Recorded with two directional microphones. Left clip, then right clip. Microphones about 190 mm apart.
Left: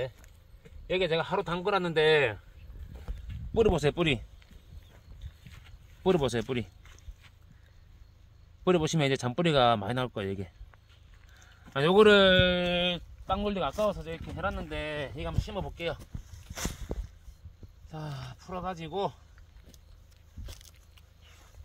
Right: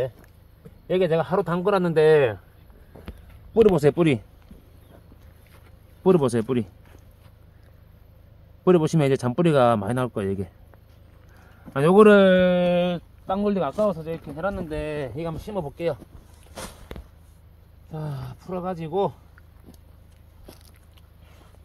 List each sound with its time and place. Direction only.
0.8 s speech: 20° left (ahead or behind)
2.1 s speech: 30° left (ahead or behind)
3.5 s speech: 15° left (ahead or behind)
6.0 s speech: 20° left (ahead or behind)
8.6 s speech: 15° left (ahead or behind)
11.7 s speech: 25° left (ahead or behind)
13.3 s speech: centre (ahead or behind)
17.9 s speech: centre (ahead or behind)